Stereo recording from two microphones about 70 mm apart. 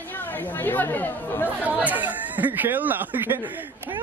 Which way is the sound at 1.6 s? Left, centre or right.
Right.